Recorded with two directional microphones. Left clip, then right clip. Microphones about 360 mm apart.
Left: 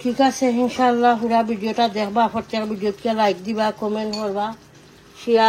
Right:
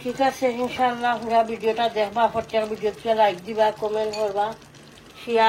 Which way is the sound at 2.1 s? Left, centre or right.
Left.